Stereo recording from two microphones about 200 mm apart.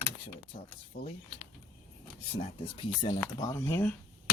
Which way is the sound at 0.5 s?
40° left (ahead or behind).